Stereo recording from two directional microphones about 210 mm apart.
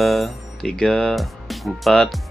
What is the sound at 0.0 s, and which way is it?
Speech, centre (ahead or behind).